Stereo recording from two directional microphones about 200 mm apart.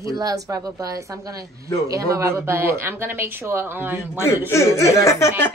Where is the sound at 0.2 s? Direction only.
15° right (ahead or behind).